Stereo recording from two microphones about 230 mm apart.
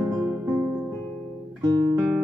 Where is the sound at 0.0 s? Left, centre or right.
Centre.